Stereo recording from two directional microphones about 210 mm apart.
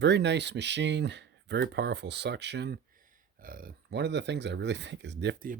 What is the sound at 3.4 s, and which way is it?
Speech, 45° right (ahead or behind).